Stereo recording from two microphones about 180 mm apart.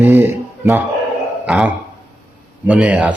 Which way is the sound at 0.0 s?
10° right (ahead or behind).